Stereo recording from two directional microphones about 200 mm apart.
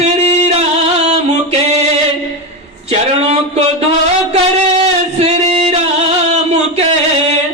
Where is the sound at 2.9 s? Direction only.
30° right (ahead or behind).